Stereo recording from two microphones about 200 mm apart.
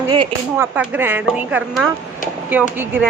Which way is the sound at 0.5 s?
10° right (ahead or behind).